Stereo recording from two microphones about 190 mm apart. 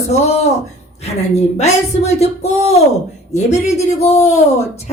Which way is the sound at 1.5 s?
35° left (ahead or behind).